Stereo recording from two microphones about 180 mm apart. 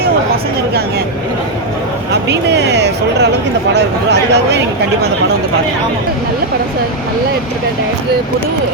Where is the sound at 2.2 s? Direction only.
70° right (ahead or behind).